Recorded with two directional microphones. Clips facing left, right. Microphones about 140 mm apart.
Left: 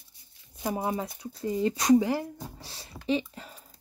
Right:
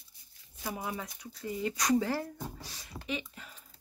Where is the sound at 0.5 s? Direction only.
20° left (ahead or behind).